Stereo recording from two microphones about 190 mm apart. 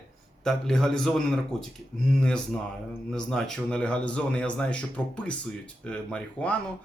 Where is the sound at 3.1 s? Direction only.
Centre (ahead or behind).